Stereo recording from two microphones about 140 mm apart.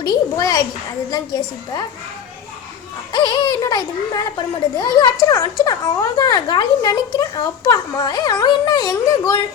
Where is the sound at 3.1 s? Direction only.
30° left (ahead or behind).